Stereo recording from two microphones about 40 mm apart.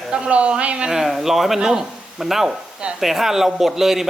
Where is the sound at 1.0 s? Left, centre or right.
Centre.